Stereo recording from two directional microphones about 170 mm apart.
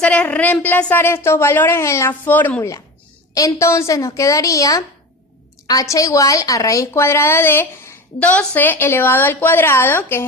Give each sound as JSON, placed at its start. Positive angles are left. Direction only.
{"t": 0.0, "sound": "a woman's voice", "side_deg": 5}